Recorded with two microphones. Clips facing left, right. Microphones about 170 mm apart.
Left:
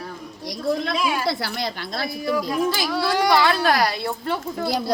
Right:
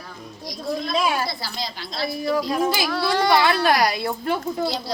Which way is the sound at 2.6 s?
10° right (ahead or behind).